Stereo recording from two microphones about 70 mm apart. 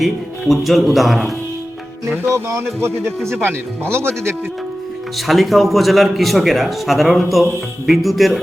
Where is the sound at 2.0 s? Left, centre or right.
Right.